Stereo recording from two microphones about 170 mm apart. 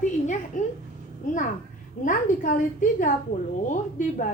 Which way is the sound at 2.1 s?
50° left (ahead or behind).